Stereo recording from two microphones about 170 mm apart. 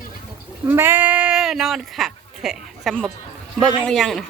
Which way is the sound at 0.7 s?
10° right (ahead or behind).